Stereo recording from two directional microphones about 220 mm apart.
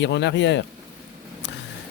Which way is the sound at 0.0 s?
55° left (ahead or behind).